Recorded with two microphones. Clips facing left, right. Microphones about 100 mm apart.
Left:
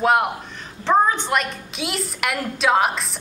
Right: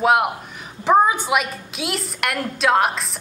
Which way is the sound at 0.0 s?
5° right (ahead or behind).